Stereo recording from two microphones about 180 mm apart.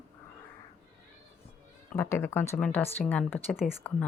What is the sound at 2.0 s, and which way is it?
Speech, 15° left (ahead or behind).